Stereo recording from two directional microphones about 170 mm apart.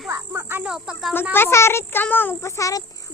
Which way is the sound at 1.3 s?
15° left (ahead or behind).